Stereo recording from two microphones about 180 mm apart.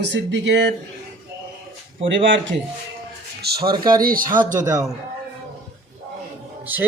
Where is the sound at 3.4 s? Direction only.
60° right (ahead or behind).